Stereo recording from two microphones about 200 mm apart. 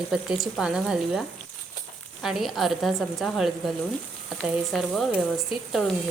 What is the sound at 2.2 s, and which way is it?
Speech, centre (ahead or behind).